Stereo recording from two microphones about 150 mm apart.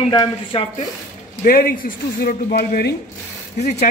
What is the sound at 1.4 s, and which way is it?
Speech, 75° left (ahead or behind).